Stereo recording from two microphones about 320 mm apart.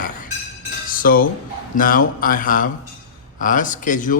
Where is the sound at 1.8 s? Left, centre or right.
Left.